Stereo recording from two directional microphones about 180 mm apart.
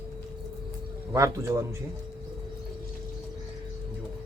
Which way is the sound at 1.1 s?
15° right (ahead or behind).